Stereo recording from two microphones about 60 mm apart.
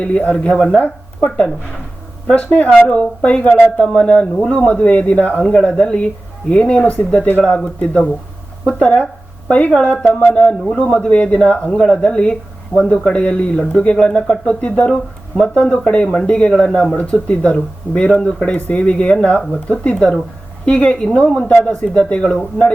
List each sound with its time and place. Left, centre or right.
0.0 s speech: left
2.3 s speech: left